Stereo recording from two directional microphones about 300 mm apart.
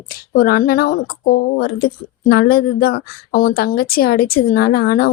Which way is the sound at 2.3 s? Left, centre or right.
Left.